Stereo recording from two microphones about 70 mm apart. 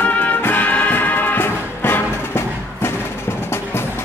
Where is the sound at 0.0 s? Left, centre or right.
Left.